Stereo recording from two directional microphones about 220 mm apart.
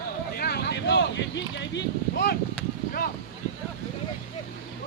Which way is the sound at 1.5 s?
50° left (ahead or behind).